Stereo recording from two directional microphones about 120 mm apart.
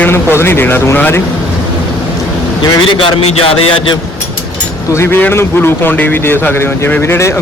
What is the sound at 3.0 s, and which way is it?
Speech, 50° left (ahead or behind).